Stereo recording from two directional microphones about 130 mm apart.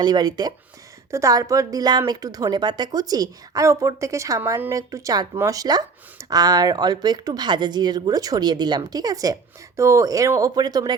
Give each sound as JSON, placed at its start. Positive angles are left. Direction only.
{"t": 0.0, "sound": "a woman's voice", "side_deg": -35}